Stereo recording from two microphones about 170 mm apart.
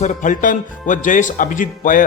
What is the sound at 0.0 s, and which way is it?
Speech, 45° left (ahead or behind).